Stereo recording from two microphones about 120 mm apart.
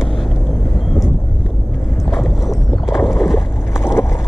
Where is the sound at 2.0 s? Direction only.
Centre (ahead or behind).